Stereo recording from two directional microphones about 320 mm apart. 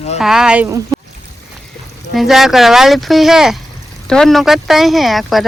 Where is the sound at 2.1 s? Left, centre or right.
Centre.